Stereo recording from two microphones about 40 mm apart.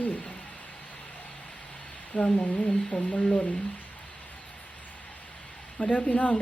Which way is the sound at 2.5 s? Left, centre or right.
Left.